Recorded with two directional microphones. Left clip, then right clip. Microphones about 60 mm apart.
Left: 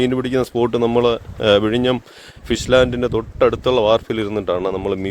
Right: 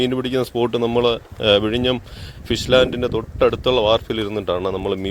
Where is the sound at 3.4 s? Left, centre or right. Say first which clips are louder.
Left 1 dB; left.